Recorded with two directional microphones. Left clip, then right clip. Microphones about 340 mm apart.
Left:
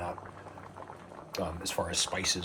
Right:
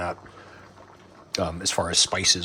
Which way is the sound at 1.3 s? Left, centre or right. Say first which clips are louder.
Right 8 dB; right.